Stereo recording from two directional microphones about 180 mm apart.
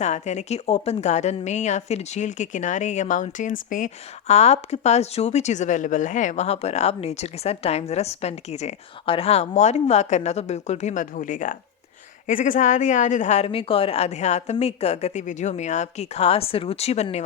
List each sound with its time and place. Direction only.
0.0 s a woman's voice: 40° left (ahead or behind)